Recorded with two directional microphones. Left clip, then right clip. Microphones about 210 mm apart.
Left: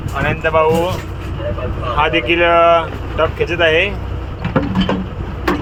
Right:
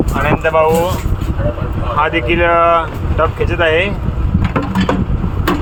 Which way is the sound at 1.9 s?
Centre (ahead or behind).